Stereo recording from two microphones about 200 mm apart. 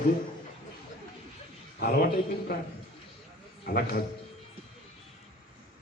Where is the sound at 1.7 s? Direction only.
50° left (ahead or behind).